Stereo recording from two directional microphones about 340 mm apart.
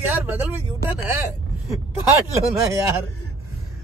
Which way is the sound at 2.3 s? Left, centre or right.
Centre.